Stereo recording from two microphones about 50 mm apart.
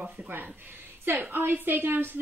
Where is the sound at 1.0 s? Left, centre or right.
Right.